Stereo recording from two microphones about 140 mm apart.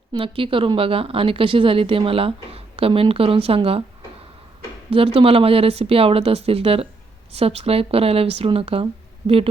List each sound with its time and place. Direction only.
0.1 s speech: 40° right (ahead or behind)
4.9 s speech: 40° right (ahead or behind)